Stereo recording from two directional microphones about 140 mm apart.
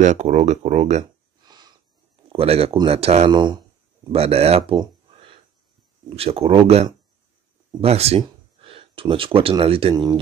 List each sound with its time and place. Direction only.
0.0 s speech: 55° right (ahead or behind)
1.4 s a sound: 30° right (ahead or behind)
2.2 s speech: 45° right (ahead or behind)
3.3 s speech: 35° right (ahead or behind)
4.1 s speech: 45° right (ahead or behind)
4.7 s a sound: 40° right (ahead or behind)
6.0 s speech: 45° right (ahead or behind)